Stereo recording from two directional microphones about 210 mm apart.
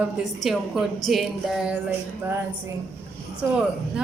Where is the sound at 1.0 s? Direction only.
Centre (ahead or behind).